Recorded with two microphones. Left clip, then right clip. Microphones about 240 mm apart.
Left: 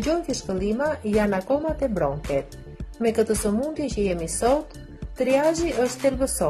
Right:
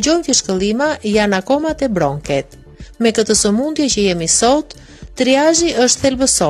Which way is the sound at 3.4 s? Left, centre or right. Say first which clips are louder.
Right 9 dB; right.